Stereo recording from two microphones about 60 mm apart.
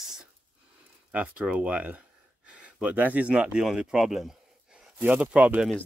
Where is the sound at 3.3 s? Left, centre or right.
Centre.